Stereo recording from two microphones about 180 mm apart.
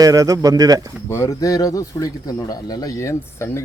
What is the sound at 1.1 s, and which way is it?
A man's voice, 20° left (ahead or behind).